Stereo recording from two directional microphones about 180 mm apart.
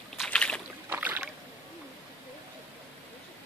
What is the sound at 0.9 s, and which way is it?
Boat, 10° right (ahead or behind).